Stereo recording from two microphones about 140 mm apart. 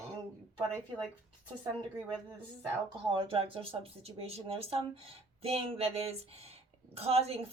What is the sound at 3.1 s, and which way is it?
A woman's voice, 40° right (ahead or behind).